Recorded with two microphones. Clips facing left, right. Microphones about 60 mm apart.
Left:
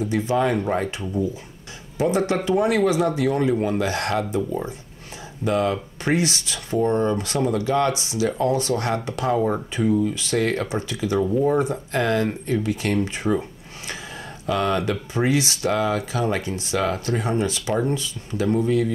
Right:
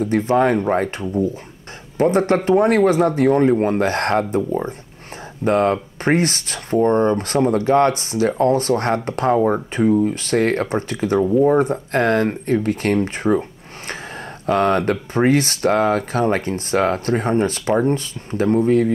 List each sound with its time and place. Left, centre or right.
0.0 s speech: right
11.1 s speech: right
11.5 s speech: right